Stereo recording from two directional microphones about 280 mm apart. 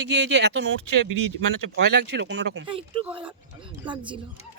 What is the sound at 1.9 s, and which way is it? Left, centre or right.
Speech, right.